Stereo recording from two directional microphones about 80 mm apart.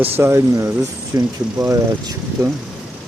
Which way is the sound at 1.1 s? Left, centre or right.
Right.